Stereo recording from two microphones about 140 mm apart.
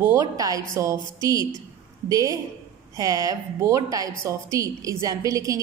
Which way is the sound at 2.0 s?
25° right (ahead or behind).